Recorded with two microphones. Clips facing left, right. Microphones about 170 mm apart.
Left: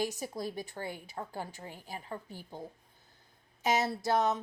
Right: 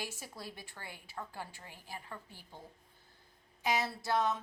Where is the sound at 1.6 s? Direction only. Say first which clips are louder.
Left 5 dB; 20° left (ahead or behind).